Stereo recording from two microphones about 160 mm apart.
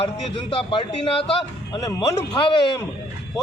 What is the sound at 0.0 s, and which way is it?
A man's voice, 35° left (ahead or behind).